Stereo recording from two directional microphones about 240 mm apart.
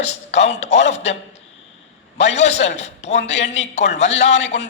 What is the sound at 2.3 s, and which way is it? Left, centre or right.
A man's voice, left.